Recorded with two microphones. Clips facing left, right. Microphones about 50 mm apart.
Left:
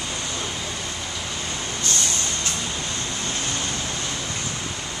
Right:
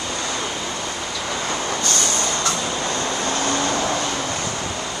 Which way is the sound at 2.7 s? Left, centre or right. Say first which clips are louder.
Right 6 dB; right.